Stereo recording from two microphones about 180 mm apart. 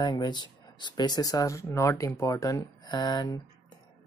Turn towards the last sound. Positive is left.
turn(degrees=25)  # may be behind; listen again after turning